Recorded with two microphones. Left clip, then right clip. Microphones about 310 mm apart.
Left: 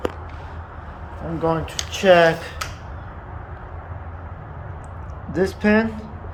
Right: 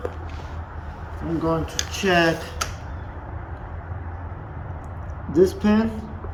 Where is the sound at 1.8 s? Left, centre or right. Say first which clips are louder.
Left 7 dB; centre.